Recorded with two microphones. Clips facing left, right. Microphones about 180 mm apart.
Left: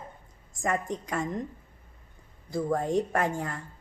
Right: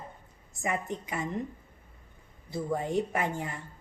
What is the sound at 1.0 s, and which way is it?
Speech, 5° right (ahead or behind).